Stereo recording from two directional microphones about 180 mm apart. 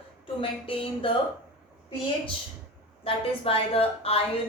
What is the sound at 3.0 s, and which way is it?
A woman's voice, 30° left (ahead or behind).